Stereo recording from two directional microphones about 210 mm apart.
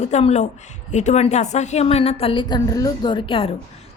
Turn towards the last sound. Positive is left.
turn(degrees=25)  # may be behind; listen again after turning